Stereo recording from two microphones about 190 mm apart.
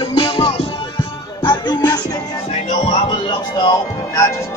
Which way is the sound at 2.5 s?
35° left (ahead or behind).